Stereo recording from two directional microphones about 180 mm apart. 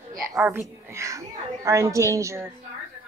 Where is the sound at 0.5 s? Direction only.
15° right (ahead or behind).